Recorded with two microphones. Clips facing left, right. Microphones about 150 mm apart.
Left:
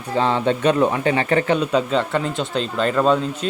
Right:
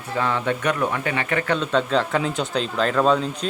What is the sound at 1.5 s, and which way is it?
Speech, 15° left (ahead or behind).